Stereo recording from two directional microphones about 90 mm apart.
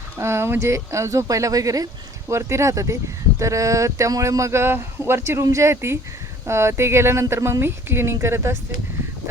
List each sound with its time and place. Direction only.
0.2 s a woman's voice: 30° right (ahead or behind)